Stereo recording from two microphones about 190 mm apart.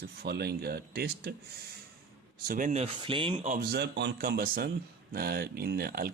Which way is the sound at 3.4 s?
45° right (ahead or behind).